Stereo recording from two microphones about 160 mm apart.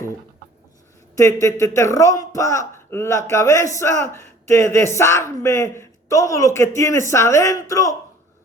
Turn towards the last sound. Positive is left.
turn(degrees=20)  # may be behind; listen again after turning